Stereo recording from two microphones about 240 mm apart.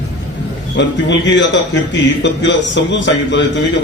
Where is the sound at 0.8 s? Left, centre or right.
Left.